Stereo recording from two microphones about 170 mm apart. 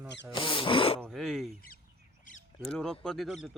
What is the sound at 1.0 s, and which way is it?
Speech, centre (ahead or behind).